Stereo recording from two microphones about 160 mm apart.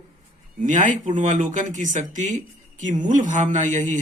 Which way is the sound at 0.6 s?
55° right (ahead or behind).